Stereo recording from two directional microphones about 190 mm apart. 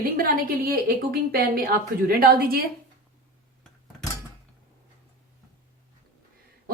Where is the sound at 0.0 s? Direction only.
50° right (ahead or behind).